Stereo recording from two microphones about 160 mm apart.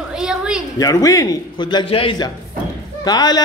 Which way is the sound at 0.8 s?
20° left (ahead or behind).